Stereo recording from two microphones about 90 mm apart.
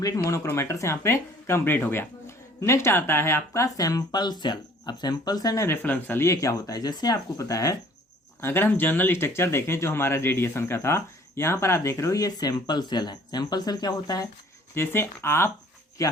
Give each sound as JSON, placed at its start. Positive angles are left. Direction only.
{"t": 0.0, "sound": "speech", "side_deg": 40}
{"t": 5.6, "sound": "speech", "side_deg": 20}
{"t": 8.4, "sound": "speech", "side_deg": 25}
{"t": 14.8, "sound": "speech", "side_deg": 30}
{"t": 16.0, "sound": "speech", "side_deg": 40}